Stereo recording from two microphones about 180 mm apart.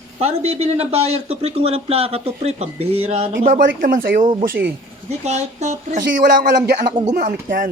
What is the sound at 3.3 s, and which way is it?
Speech, 50° right (ahead or behind).